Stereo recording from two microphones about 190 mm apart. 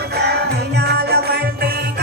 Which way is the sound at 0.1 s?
60° right (ahead or behind).